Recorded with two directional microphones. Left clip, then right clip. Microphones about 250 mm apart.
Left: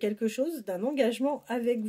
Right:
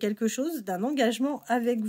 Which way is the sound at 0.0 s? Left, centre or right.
Right.